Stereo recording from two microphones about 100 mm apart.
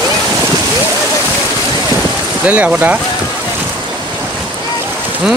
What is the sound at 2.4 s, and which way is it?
Speech, 15° right (ahead or behind).